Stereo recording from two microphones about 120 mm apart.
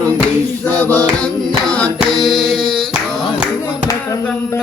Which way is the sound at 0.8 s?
15° left (ahead or behind).